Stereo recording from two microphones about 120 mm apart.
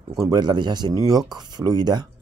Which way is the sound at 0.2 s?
35° right (ahead or behind).